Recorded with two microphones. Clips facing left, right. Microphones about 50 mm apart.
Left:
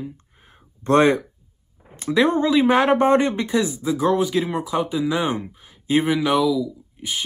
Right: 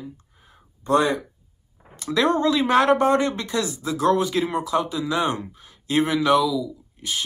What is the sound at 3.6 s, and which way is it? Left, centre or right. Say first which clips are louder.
Speech: even; centre.